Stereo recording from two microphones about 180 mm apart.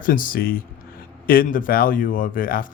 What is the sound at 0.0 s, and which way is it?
Speech, 50° left (ahead or behind).